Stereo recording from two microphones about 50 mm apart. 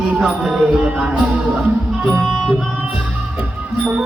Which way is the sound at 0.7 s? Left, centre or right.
Centre.